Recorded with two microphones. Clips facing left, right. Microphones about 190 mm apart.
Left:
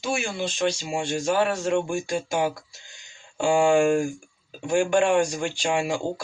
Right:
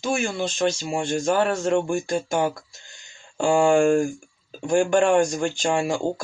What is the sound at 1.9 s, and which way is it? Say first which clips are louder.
Speech: right 3 dB; 10° left (ahead or behind).